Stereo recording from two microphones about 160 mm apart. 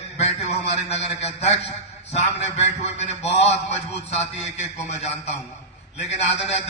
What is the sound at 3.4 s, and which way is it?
A man's voice, 40° left (ahead or behind).